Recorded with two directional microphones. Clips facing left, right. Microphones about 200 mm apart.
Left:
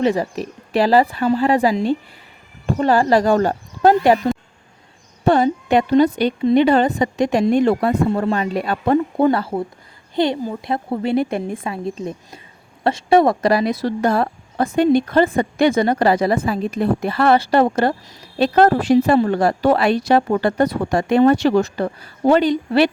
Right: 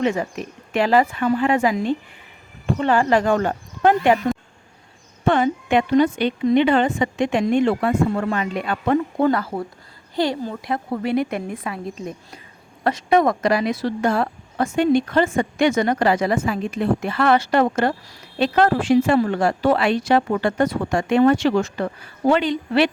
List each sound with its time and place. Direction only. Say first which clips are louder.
0.0 s speech: left 3 dB; 35° left (ahead or behind)
5.2 s a woman's voice: left 3 dB; 35° left (ahead or behind)